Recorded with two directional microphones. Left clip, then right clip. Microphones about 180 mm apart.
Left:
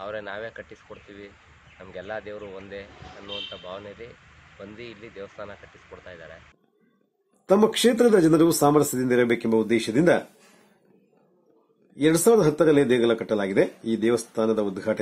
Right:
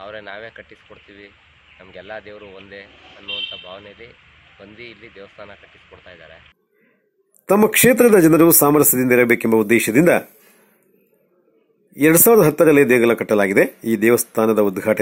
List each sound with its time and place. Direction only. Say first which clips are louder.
0.0 s speech: even; 5° left (ahead or behind)
7.5 s speech: right 6 dB; 25° right (ahead or behind)
12.0 s speech: right 6 dB; 25° right (ahead or behind)